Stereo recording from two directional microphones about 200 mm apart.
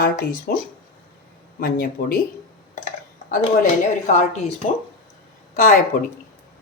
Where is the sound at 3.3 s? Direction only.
40° left (ahead or behind).